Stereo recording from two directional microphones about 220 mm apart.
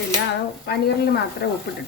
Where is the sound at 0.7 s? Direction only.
45° left (ahead or behind).